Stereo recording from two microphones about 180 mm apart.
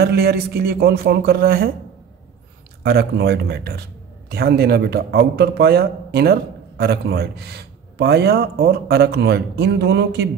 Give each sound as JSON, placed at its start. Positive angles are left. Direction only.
{"t": 0.0, "sound": "a man's voice", "side_deg": -60}
{"t": 2.8, "sound": "a man's voice", "side_deg": -60}